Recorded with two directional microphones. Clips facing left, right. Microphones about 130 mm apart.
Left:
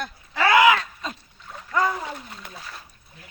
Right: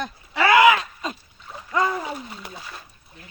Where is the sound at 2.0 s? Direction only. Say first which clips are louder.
Right 3 dB; 5° right (ahead or behind).